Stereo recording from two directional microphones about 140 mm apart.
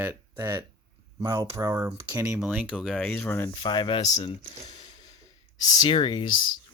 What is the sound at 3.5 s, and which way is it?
Speech, 35° left (ahead or behind).